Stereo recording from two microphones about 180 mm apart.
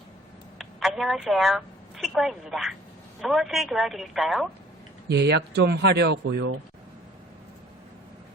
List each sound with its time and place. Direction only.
0.6 s a woman's voice: centre (ahead or behind)
5.0 s speech: 70° right (ahead or behind); by 6.6 s 90° right